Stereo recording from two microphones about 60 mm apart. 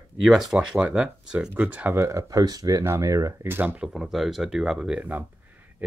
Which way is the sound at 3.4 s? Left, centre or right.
Right.